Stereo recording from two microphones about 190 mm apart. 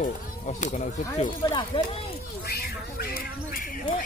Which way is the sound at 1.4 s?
20° left (ahead or behind).